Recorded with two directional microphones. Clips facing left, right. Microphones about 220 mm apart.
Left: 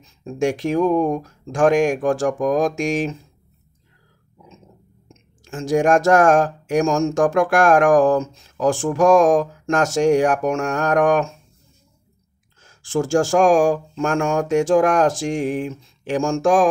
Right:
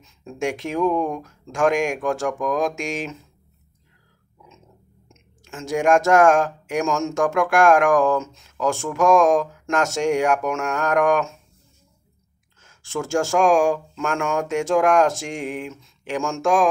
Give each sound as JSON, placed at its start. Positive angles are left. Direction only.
{"t": 0.0, "sound": "speech", "side_deg": 35}
{"t": 5.0, "sound": "speech", "side_deg": 35}
{"t": 12.6, "sound": "speech", "side_deg": 35}